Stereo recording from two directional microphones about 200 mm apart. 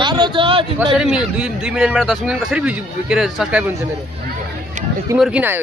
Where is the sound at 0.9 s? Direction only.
5° right (ahead or behind).